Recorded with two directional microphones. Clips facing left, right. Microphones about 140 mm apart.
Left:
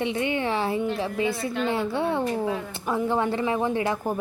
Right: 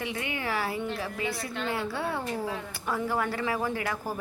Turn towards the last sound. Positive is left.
turn(degrees=25)  # may be behind; listen again after turning